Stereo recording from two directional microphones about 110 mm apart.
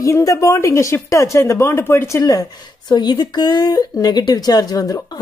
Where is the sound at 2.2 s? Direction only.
35° left (ahead or behind).